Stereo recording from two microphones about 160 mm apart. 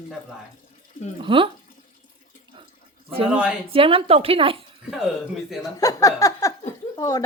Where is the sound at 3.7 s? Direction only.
35° right (ahead or behind).